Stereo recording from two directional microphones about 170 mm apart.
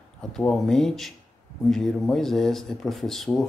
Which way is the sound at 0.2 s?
5° left (ahead or behind).